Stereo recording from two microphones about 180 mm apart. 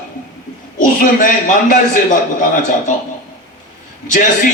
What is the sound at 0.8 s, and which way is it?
Speech, 45° left (ahead or behind).